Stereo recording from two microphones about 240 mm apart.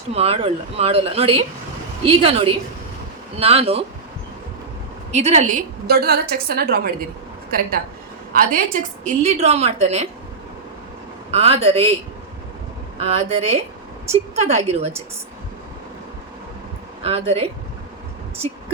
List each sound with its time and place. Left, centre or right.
0.1 s a woman's voice: right
5.1 s a woman's voice: right
8.3 s a woman's voice: right
11.3 s a woman's voice: right
13.0 s a woman's voice: right
17.0 s a woman's voice: right